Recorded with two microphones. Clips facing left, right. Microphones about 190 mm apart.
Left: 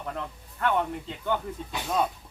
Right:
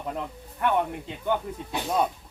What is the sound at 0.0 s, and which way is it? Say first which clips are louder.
Speech: right 2 dB; 15° right (ahead or behind).